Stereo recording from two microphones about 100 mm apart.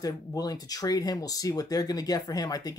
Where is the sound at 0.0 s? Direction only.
40° left (ahead or behind).